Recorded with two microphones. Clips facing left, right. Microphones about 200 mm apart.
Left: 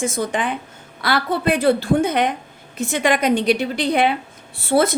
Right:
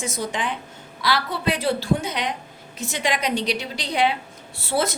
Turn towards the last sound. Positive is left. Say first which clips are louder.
# left 7 dB
turn(degrees=55)  # may be behind; listen again after turning